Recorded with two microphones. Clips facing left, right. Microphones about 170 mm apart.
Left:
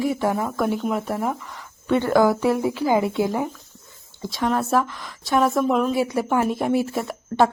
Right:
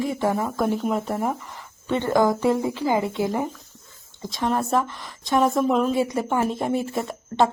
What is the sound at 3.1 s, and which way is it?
Speech, 20° right (ahead or behind).